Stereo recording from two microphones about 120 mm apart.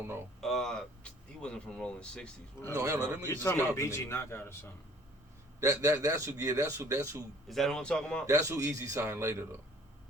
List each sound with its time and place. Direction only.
0.4 s speech: 5° left (ahead or behind)
2.7 s a man's voice: 25° right (ahead or behind)
3.2 s a man's voice: 20° left (ahead or behind)
5.5 s a man's voice: 25° right (ahead or behind)
7.4 s a man's voice: centre (ahead or behind)
8.3 s a man's voice: 25° right (ahead or behind)